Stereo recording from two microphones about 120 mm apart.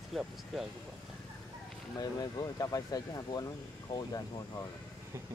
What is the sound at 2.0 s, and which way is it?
Speech, 35° left (ahead or behind).